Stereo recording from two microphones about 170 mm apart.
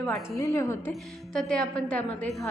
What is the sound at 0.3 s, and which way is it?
Speech, 20° left (ahead or behind).